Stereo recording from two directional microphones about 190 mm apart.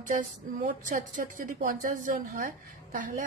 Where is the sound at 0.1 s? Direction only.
45° right (ahead or behind).